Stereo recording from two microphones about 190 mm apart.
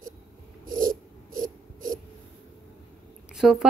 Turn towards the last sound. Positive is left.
turn(degrees=0)  # may be behind; listen again after turning